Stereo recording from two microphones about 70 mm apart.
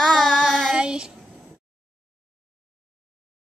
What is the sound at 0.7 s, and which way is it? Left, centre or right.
Speech, centre.